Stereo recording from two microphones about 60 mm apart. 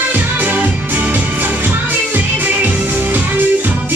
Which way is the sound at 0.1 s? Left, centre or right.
Right.